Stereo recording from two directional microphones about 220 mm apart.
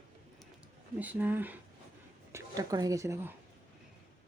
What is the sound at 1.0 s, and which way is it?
A woman's voice, 5° right (ahead or behind).